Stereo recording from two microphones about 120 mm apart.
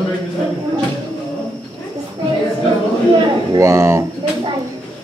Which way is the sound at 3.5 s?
25° right (ahead or behind).